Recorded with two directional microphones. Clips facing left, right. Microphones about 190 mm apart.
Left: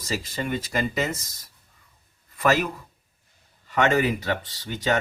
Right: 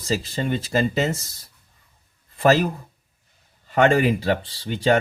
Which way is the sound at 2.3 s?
30° right (ahead or behind).